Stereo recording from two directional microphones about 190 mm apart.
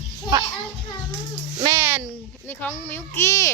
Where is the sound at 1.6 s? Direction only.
15° right (ahead or behind).